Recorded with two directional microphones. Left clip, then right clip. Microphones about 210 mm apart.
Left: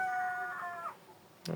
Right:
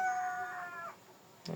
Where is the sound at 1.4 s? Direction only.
35° left (ahead or behind).